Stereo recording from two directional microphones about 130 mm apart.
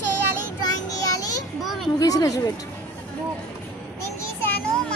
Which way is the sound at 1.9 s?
25° left (ahead or behind).